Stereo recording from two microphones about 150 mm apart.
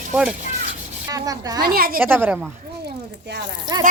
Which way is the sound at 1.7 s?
85° right.